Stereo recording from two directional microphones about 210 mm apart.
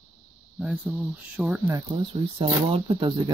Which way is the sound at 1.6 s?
20° right (ahead or behind).